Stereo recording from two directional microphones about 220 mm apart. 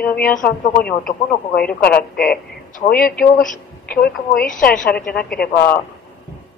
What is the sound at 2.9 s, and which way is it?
A woman's voice, 40° left (ahead or behind).